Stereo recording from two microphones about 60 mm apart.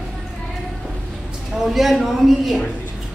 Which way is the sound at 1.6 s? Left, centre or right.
Centre.